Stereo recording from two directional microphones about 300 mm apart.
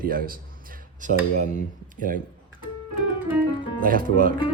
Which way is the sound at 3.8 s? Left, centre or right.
Right.